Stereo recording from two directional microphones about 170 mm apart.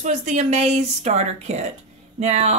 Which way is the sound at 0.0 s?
45° right (ahead or behind).